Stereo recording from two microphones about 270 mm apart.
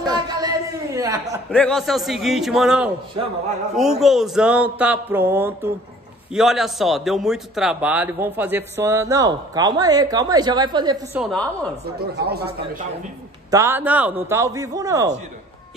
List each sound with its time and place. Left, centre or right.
0.0 s a sound: centre
1.5 s a man's voice: centre
11.1 s speech: centre
12.3 s speech: right
13.5 s a man's voice: centre